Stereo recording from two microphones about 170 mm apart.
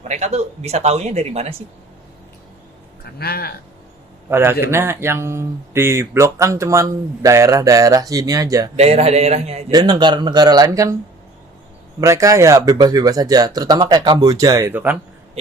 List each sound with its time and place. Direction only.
0.1 s speech: 40° right (ahead or behind)
3.2 s speech: 65° left (ahead or behind)
4.3 s speech: 15° right (ahead or behind)
8.7 s speech: 35° right (ahead or behind)
9.7 s speech: 25° right (ahead or behind)
11.9 s speech: 20° right (ahead or behind)